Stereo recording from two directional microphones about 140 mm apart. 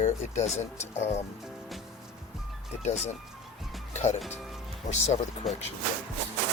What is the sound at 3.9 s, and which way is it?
Music, 55° left (ahead or behind).